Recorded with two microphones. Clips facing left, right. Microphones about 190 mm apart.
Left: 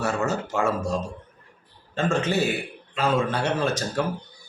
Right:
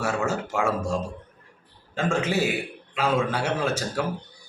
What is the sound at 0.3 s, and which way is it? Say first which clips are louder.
Speech: left 1 dB; 10° right (ahead or behind).